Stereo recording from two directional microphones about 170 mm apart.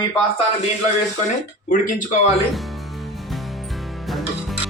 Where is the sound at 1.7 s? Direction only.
50° left (ahead or behind).